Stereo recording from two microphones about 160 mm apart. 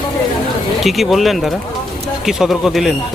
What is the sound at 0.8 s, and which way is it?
Speech, centre (ahead or behind).